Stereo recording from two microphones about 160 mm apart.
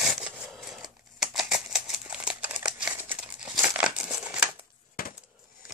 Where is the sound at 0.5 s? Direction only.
Centre (ahead or behind).